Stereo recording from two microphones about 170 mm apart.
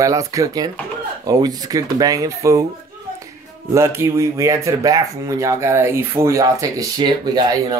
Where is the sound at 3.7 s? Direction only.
15° right (ahead or behind).